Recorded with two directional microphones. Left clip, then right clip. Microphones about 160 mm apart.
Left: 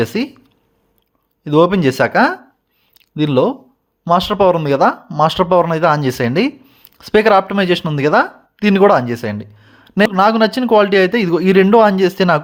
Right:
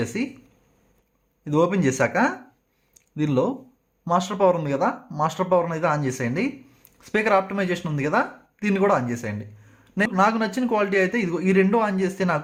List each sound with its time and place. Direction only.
0.0 s speech: 45° left (ahead or behind)
1.5 s speech: 40° left (ahead or behind)
2.9 s a sound: 35° left (ahead or behind)
4.0 s speech: 35° left (ahead or behind)